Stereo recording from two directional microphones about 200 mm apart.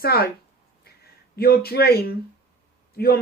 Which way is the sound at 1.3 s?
50° left (ahead or behind).